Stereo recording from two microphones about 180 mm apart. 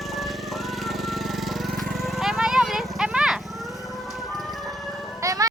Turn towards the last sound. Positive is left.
turn(degrees=-20)  # may be behind; listen again after turning